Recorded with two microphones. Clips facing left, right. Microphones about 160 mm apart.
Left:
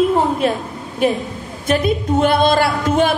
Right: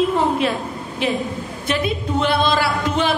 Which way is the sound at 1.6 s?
45° left (ahead or behind).